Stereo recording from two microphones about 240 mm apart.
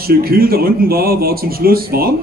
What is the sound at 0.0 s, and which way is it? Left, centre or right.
Speech, right.